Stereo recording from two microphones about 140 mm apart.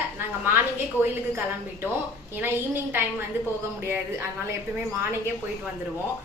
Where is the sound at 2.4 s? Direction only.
15° right (ahead or behind).